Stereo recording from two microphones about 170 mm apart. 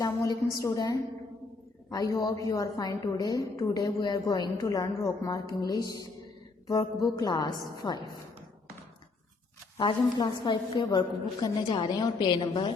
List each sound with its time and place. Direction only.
0.0 s a woman's voice: 20° left (ahead or behind)
7.2 s a woman's voice: 25° left (ahead or behind)
9.7 s a woman's voice: 25° left (ahead or behind)